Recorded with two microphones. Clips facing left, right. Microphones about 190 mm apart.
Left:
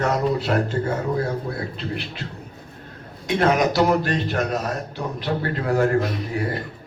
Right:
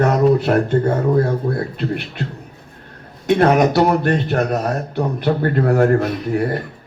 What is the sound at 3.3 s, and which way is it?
A man's voice, 55° right (ahead or behind).